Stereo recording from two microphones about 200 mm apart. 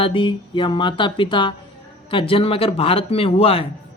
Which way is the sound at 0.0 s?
25° left (ahead or behind).